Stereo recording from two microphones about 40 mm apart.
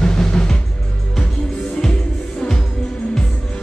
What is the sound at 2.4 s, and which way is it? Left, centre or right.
Music, centre.